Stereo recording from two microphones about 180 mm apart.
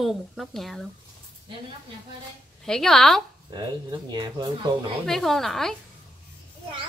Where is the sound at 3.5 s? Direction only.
25° right (ahead or behind).